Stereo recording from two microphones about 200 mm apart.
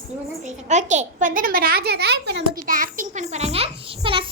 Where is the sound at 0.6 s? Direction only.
35° right (ahead or behind).